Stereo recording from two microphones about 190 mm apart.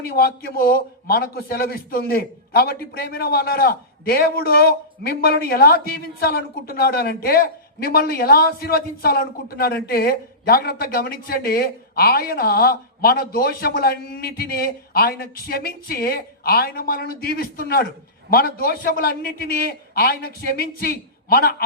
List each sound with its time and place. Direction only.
0.0 s a man's voice: 50° left (ahead or behind)